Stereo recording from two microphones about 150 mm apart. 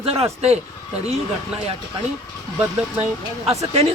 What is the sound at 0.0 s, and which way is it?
Speech, 40° right (ahead or behind).